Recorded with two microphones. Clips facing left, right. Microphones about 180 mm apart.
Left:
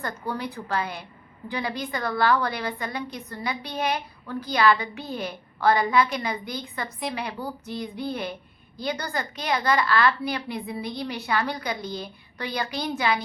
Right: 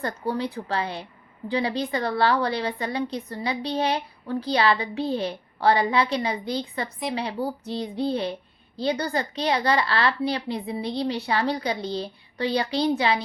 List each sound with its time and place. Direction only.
0.0 s a woman's voice: 25° right (ahead or behind)